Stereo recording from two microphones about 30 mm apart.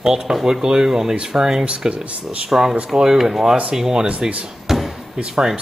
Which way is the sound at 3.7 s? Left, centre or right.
Right.